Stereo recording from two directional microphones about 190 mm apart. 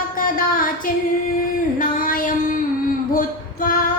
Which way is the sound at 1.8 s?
45° left (ahead or behind).